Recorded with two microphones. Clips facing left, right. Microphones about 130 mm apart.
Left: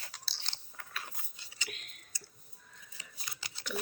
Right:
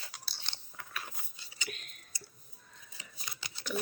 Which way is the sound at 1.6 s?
40° right (ahead or behind).